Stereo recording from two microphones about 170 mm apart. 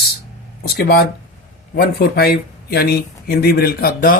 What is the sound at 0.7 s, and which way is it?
Speech, 65° left (ahead or behind).